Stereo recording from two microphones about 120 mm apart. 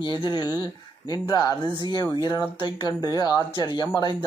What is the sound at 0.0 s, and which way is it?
Speech, 40° left (ahead or behind).